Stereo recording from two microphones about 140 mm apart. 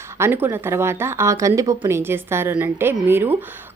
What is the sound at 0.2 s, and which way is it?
Speech, 15° right (ahead or behind).